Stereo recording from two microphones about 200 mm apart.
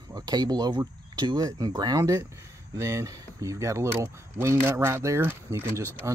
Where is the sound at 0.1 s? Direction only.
20° right (ahead or behind).